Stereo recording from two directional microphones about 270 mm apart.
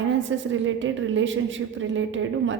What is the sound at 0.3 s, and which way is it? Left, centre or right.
A woman's voice, right.